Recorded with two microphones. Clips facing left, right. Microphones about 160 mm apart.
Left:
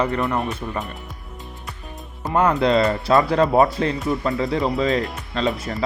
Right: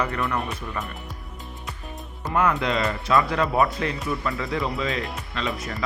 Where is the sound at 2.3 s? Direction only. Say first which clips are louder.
Left 5 dB; 30° left (ahead or behind).